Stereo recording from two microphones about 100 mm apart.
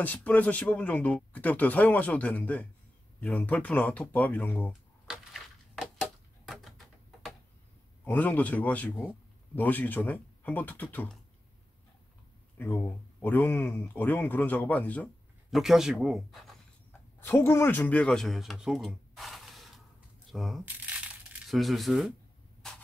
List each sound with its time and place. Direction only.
0.0 s speech: 15° left (ahead or behind)
5.1 s a sound: centre (ahead or behind)
8.0 s speech: 15° left (ahead or behind)
12.5 s speech: 20° left (ahead or behind)
15.5 s speech: 5° right (ahead or behind)
17.2 s a man's voice: 25° left (ahead or behind); by 20.6 s centre (ahead or behind)
20.6 s crushing: 15° right (ahead or behind)
21.5 s speech: centre (ahead or behind)
22.6 s a sound: 5° left (ahead or behind)